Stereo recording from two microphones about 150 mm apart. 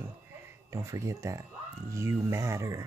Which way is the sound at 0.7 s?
20° right (ahead or behind).